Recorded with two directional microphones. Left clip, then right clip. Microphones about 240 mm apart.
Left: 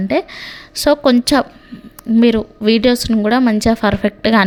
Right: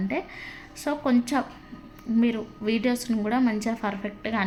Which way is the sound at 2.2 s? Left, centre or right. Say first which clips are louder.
Left 13 dB; left.